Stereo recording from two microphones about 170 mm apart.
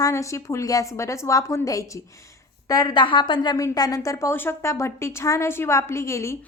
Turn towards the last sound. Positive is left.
turn(degrees=15)  # may be behind; listen again after turning